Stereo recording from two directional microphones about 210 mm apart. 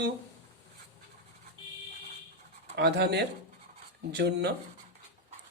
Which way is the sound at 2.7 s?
55° right (ahead or behind).